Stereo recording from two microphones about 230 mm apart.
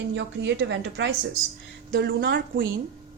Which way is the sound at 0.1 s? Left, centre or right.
Right.